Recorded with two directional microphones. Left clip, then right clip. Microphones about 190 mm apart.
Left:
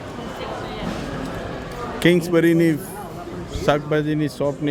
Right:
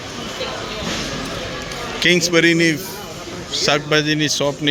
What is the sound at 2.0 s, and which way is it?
A man's voice, 20° left (ahead or behind).